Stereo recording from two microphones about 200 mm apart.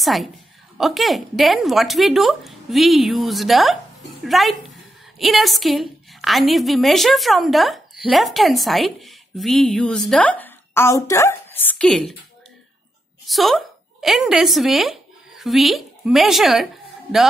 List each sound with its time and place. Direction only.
0.0 s a woman's voice: centre (ahead or behind)
13.2 s a woman's voice: centre (ahead or behind)